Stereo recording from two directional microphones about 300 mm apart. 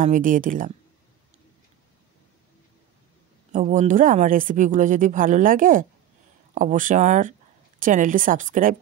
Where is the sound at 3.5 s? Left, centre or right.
Right.